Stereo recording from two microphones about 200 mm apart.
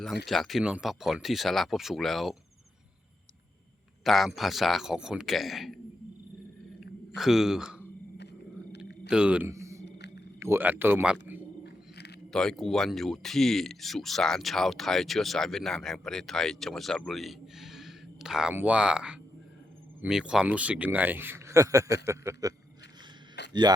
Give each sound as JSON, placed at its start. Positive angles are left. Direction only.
{"t": 0.3, "sound": "speech", "side_deg": 0}
{"t": 4.0, "sound": "speech", "side_deg": 0}
{"t": 7.2, "sound": "speech", "side_deg": 0}
{"t": 9.0, "sound": "a man's voice", "side_deg": -5}
{"t": 9.8, "sound": "a sound", "side_deg": 60}
{"t": 10.4, "sound": "speech", "side_deg": -10}
{"t": 11.6, "sound": "a sound", "side_deg": 55}
{"t": 12.3, "sound": "a man's voice", "side_deg": 5}